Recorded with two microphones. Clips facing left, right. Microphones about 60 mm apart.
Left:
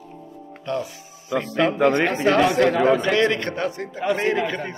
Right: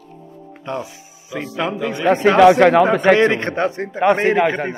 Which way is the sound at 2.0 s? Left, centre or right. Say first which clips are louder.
Right 8 dB; right.